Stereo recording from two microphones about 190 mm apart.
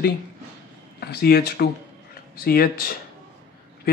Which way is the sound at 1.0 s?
55° left (ahead or behind).